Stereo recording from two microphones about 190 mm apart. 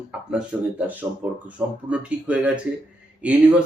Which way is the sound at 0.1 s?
5° right (ahead or behind).